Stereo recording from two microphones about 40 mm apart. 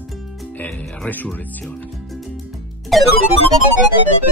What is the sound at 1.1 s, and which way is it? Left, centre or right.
Speech, left.